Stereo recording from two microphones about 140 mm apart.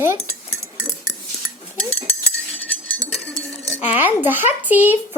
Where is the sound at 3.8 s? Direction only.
10° right (ahead or behind).